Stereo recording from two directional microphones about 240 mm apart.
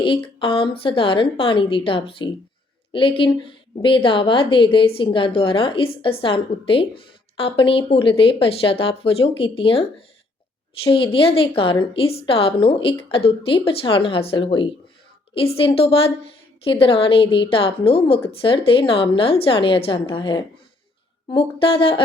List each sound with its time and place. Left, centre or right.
0.0 s a woman's voice: left
10.8 s a woman's voice: left